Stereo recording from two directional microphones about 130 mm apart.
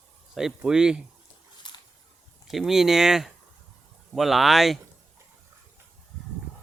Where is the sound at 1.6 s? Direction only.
35° left (ahead or behind).